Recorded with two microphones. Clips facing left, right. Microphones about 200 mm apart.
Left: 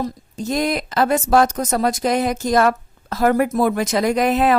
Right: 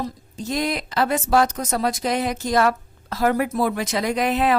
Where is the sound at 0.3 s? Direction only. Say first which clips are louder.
Left 4 dB; 45° left (ahead or behind).